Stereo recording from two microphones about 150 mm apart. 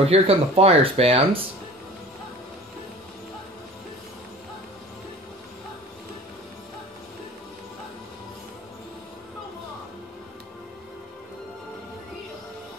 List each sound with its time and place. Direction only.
0.0 s speech: 40° right (ahead or behind)